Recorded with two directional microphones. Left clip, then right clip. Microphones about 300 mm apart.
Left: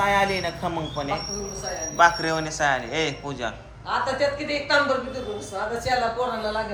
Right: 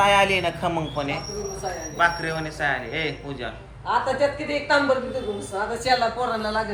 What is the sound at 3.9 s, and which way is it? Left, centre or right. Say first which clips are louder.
Speech: right 2 dB; right.